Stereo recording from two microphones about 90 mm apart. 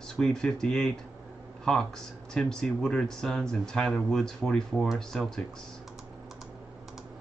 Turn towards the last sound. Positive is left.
turn(degrees=5)  # may be behind; listen again after turning